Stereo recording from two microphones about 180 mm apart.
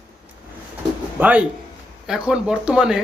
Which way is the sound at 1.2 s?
5° right (ahead or behind).